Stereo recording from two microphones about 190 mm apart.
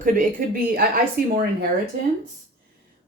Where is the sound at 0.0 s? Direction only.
45° right (ahead or behind).